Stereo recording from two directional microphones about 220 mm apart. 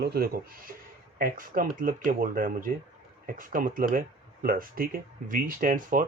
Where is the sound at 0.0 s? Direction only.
45° right (ahead or behind).